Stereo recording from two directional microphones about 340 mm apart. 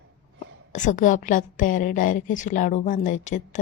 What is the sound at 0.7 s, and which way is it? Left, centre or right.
Speech, left.